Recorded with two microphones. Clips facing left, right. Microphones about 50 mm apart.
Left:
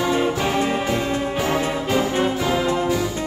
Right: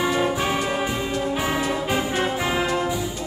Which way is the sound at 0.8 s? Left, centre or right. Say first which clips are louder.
Left 3 dB; centre.